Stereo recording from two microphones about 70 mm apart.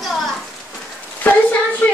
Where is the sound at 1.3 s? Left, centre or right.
Left.